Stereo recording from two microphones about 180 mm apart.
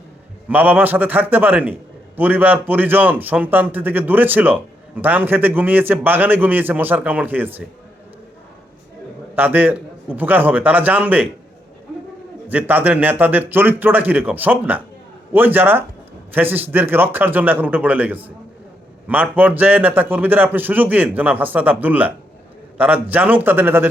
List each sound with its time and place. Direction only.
0.4 s a man's voice: 10° right (ahead or behind)
9.3 s a man's voice: 10° right (ahead or behind)
12.5 s a man's voice: 10° right (ahead or behind)